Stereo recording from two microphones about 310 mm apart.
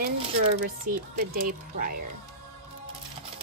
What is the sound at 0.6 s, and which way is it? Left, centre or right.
Speech, right.